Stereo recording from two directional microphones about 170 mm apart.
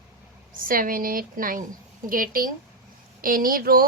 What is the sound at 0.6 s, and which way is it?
Speech, 55° right (ahead or behind).